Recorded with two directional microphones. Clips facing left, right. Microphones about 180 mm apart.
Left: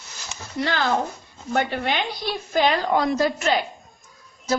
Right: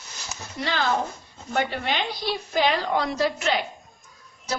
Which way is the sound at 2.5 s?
50° left (ahead or behind).